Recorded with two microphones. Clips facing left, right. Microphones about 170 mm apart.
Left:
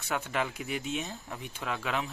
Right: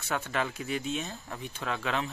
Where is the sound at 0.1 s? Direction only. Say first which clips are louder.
Even; 15° left (ahead or behind).